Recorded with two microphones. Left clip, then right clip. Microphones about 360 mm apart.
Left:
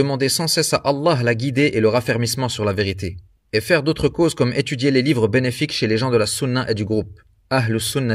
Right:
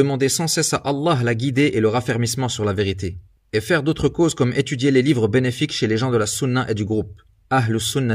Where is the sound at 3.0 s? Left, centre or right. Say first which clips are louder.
Even; left.